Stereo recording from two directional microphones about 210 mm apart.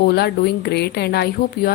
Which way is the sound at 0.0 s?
50° left (ahead or behind).